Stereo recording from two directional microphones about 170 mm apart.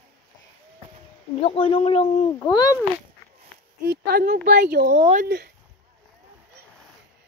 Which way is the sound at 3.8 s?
65° right (ahead or behind).